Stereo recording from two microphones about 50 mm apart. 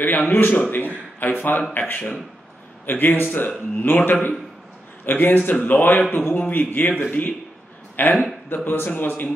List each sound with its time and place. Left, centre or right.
0.3 s a man's voice: left